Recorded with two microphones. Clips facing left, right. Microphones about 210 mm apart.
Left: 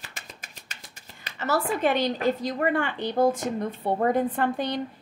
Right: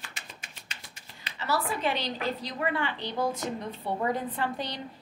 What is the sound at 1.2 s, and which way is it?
A woman's voice, 45° left (ahead or behind).